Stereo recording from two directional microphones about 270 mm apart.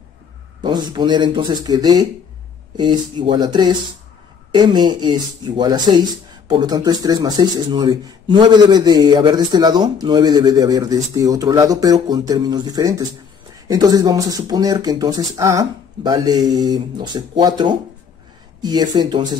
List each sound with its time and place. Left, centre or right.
0.6 s speech: centre